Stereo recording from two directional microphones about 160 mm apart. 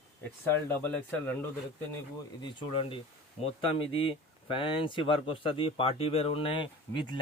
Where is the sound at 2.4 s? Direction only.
30° left (ahead or behind).